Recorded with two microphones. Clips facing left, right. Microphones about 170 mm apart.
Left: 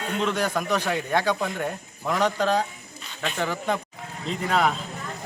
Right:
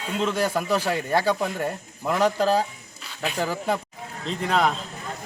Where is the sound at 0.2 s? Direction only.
5° right (ahead or behind).